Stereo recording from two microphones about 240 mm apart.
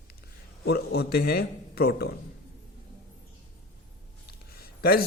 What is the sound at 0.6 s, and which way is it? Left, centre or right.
A man's voice, left.